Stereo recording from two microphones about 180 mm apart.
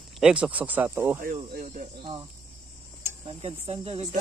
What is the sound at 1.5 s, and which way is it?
Speech, 45° right (ahead or behind).